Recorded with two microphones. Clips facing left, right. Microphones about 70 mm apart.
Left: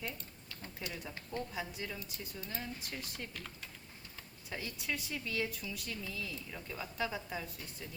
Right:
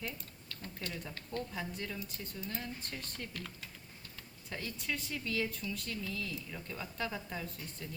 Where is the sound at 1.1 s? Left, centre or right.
Centre.